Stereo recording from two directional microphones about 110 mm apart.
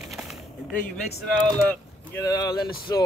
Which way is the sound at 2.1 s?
30° left (ahead or behind).